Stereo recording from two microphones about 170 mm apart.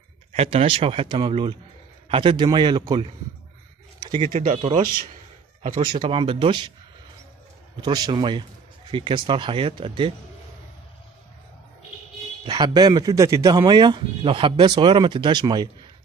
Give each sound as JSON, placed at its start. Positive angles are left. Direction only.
{"t": 0.3, "sound": "a man's voice", "side_deg": -35}
{"t": 4.2, "sound": "speech", "side_deg": -45}
{"t": 5.9, "sound": "a man's voice", "side_deg": -30}
{"t": 7.8, "sound": "a man's voice", "side_deg": -25}
{"t": 12.4, "sound": "a man's voice", "side_deg": -25}